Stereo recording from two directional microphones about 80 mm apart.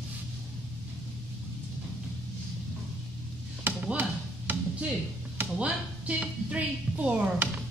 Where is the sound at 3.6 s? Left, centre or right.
Centre.